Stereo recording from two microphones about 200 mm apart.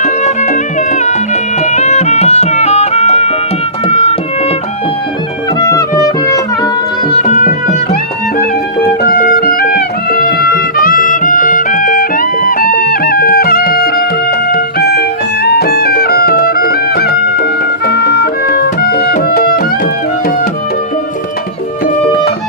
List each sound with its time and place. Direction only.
0.0 s music: 35° left (ahead or behind)
5.5 s music: 15° left (ahead or behind)
7.1 s music: 30° left (ahead or behind); by 19.6 s 50° left (ahead or behind)